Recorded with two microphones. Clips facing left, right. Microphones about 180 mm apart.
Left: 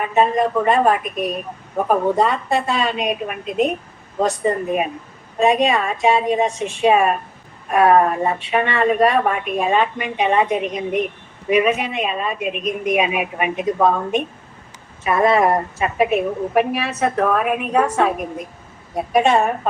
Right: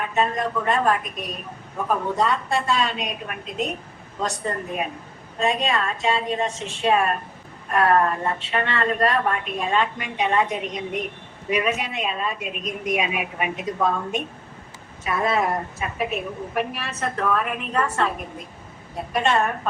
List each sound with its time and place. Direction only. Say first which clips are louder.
0.0 s a woman's voice: left 6 dB; 55° left (ahead or behind)
5.4 s a woman's voice: left 7 dB; 55° left (ahead or behind)
15.0 s a woman's voice: left 7 dB; 75° left (ahead or behind); by 19.5 s 50° left (ahead or behind)